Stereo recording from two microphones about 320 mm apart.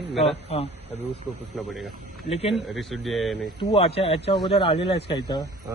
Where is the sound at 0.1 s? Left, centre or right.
Centre.